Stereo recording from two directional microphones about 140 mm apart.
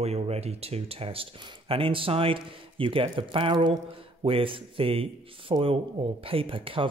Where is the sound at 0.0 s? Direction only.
50° right (ahead or behind).